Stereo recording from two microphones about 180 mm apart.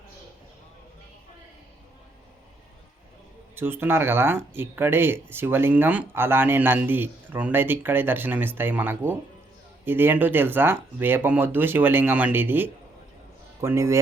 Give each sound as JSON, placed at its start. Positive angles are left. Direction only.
{"t": 3.5, "sound": "speech", "side_deg": -10}